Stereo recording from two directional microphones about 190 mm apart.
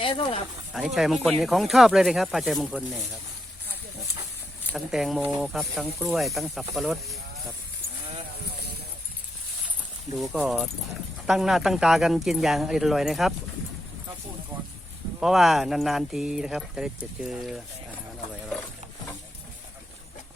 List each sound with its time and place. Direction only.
0.0 s speech: 30° left (ahead or behind)
0.9 s speech: centre (ahead or behind)
4.7 s speech: centre (ahead or behind)
10.2 s speech: 5° right (ahead or behind)
15.2 s speech: centre (ahead or behind)